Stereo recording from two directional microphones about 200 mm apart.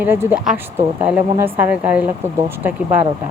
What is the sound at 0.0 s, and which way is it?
Speech, 10° right (ahead or behind).